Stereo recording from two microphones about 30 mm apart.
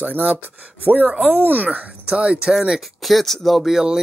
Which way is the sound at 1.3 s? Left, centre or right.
Right.